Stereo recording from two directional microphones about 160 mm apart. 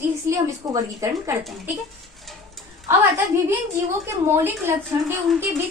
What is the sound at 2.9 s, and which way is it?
Speech, 15° right (ahead or behind).